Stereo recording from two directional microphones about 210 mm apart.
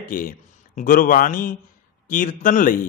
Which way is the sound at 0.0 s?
40° left (ahead or behind).